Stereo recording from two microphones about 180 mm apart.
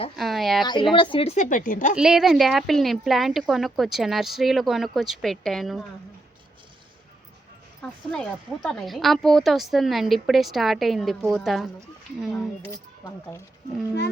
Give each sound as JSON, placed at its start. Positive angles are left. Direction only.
{"t": 0.2, "sound": "speech", "side_deg": 0}
{"t": 0.6, "sound": "speech", "side_deg": 25}
{"t": 2.0, "sound": "speech", "side_deg": -5}
{"t": 7.8, "sound": "speech", "side_deg": 5}